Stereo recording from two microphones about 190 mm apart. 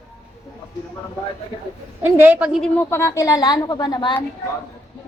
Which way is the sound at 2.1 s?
10° right (ahead or behind).